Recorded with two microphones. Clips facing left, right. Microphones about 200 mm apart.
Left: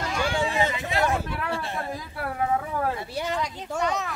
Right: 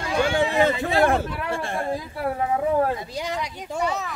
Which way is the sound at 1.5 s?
50° right (ahead or behind).